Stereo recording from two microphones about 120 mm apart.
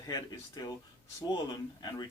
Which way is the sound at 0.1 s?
35° left (ahead or behind).